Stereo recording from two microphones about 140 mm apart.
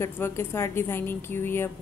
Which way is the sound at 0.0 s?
20° left (ahead or behind).